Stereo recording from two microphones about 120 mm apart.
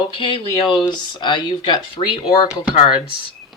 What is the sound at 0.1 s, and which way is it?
Speech, 45° left (ahead or behind).